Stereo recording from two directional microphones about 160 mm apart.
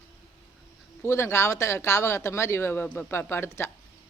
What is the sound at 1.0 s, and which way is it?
Speech, 15° left (ahead or behind).